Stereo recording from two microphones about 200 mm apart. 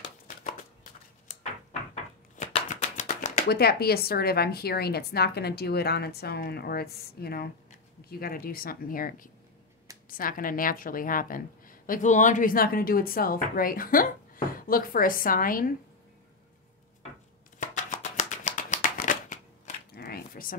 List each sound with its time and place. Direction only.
1.3 s a sound: 35° left (ahead or behind)
3.4 s a woman's voice: 50° left (ahead or behind)
17.6 s shuffling cards: 40° left (ahead or behind)